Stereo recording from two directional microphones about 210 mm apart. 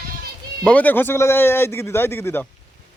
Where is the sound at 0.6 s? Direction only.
5° left (ahead or behind).